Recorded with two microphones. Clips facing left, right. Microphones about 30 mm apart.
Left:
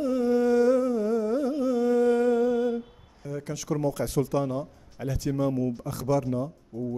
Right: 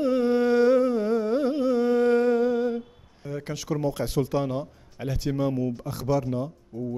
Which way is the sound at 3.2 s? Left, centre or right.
Right.